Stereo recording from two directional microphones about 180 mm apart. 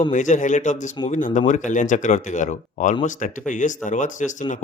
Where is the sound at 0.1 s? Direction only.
45° left (ahead or behind).